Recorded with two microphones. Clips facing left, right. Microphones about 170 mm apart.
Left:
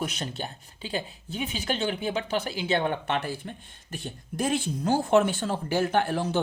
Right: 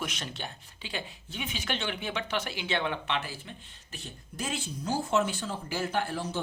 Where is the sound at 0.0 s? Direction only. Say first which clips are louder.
Left 5 dB; 35° left (ahead or behind).